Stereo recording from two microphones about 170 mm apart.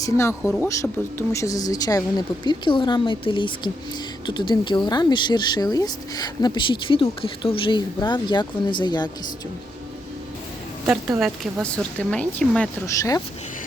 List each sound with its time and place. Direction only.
0.0 s speech: 15° left (ahead or behind)
11.2 s speech: centre (ahead or behind)
13.0 s speech: 20° left (ahead or behind)